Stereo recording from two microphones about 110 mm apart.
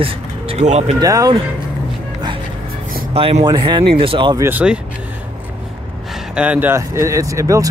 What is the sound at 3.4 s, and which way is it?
Speech, 40° right (ahead or behind).